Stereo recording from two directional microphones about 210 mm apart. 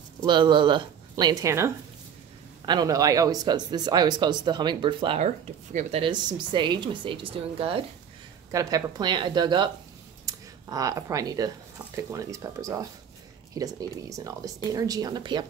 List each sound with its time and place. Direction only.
0.2 s a woman's voice: 20° right (ahead or behind)
8.5 s speech: 15° right (ahead or behind)